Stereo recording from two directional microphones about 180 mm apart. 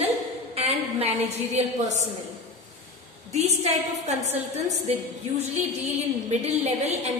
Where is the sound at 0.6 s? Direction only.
35° right (ahead or behind).